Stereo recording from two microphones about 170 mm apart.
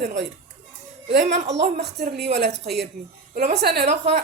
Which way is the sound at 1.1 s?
80° right.